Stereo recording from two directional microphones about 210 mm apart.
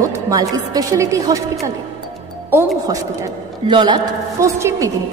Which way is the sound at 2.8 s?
15° right (ahead or behind).